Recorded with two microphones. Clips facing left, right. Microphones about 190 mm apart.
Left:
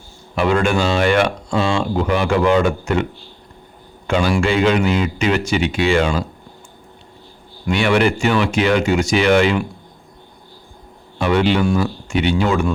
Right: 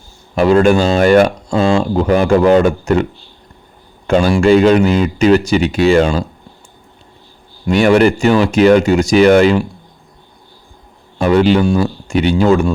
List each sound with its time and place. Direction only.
0.3 s a man's voice: 40° right (ahead or behind)
7.7 s speech: 40° right (ahead or behind)
11.2 s speech: 40° right (ahead or behind)